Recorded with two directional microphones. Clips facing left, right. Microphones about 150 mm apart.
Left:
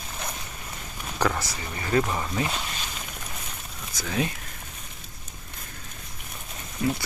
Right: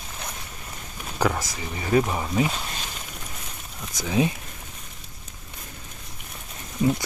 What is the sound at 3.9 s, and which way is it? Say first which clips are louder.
Speech: right 5 dB; 20° right (ahead or behind).